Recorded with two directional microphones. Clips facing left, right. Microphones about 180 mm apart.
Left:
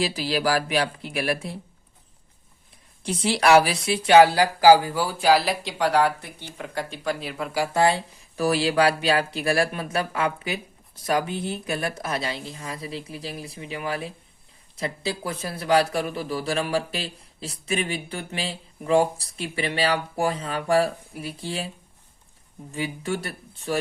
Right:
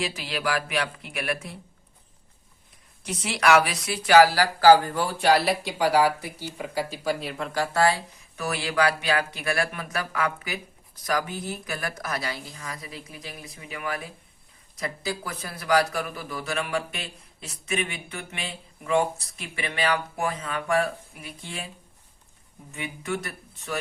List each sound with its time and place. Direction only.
0.0 s a man's voice: 35° left (ahead or behind)
3.0 s speech: 30° left (ahead or behind)
8.4 s a man's voice: 30° left (ahead or behind)
22.7 s a man's voice: 30° left (ahead or behind)